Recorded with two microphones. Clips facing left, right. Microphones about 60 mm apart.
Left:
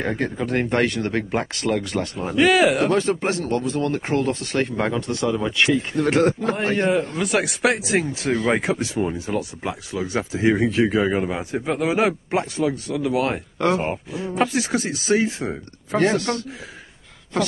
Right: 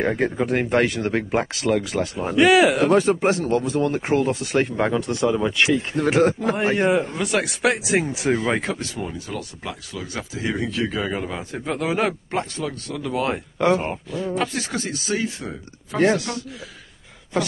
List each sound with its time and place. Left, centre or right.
0.0 s speech: centre
8.1 s speech: centre
8.5 s speech: centre
13.8 s speech: centre
16.0 s speech: centre